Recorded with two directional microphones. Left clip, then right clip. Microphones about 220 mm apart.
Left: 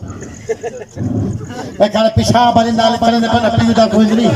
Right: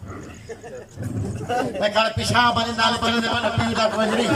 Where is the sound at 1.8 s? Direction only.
30° left (ahead or behind).